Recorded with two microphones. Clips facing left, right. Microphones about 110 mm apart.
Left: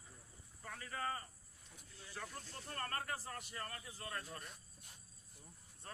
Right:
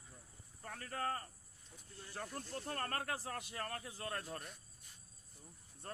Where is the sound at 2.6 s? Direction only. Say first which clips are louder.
Right 2 dB; 55° right (ahead or behind).